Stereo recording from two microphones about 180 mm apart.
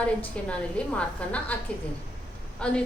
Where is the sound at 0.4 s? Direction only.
5° left (ahead or behind).